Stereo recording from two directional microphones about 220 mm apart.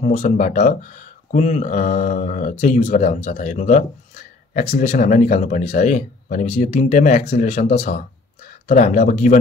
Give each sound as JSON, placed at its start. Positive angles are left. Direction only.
{"t": 0.0, "sound": "speech", "side_deg": 30}